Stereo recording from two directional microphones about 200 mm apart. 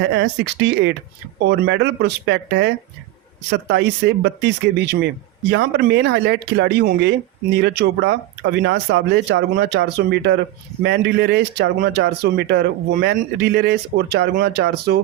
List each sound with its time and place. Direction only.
0.0 s speech: 60° right (ahead or behind)